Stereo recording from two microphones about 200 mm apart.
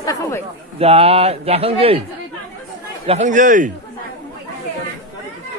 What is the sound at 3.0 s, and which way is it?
Speech, 35° right (ahead or behind).